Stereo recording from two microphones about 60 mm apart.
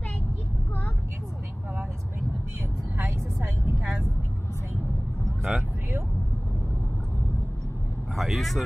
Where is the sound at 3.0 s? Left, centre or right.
Right.